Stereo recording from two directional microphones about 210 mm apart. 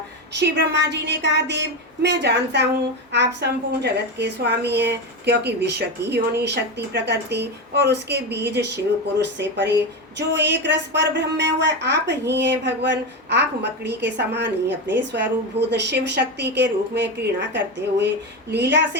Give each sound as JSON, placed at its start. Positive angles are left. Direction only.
{"t": 0.3, "sound": "a woman's voice", "side_deg": -55}